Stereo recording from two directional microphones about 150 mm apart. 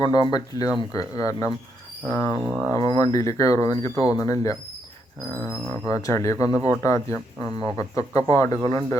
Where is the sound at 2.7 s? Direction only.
25° left (ahead or behind).